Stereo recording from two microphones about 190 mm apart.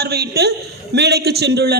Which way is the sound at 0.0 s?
55° right (ahead or behind).